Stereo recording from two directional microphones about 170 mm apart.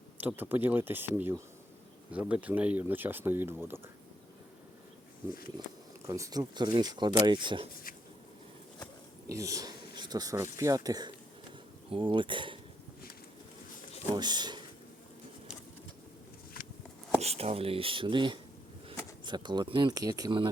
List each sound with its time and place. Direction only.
0.2 s speech: 10° right (ahead or behind)
6.1 s speech: 20° right (ahead or behind)
9.3 s speech: 20° right (ahead or behind)
14.1 s speech: 25° right (ahead or behind)
17.2 s speech: 35° right (ahead or behind)